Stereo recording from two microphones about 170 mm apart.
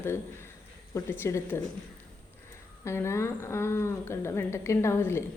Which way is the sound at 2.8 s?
15° left (ahead or behind).